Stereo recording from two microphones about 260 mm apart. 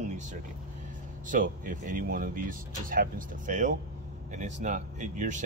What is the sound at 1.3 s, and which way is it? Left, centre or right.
Speech, right.